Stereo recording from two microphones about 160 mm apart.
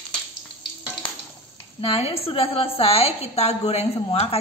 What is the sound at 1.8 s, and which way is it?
A woman's voice, 35° left (ahead or behind).